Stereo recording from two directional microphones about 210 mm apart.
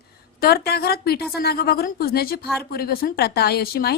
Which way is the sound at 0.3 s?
45° left (ahead or behind).